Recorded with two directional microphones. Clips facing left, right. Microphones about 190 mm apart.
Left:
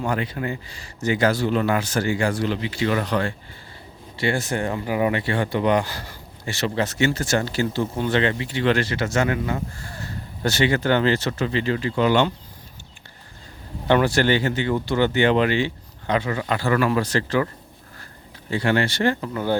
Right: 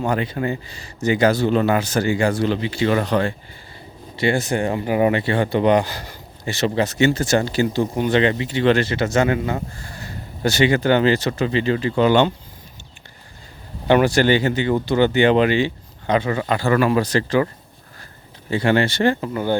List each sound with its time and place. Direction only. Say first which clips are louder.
0.0 s speech: right 4 dB; 25° right (ahead or behind)
10.0 s speech: right 3 dB; 15° right (ahead or behind)
13.8 s speech: right 3 dB; 15° right (ahead or behind)
18.5 s speech: right 3 dB; 20° right (ahead or behind)
19.3 s speech: right 2 dB; 5° right (ahead or behind)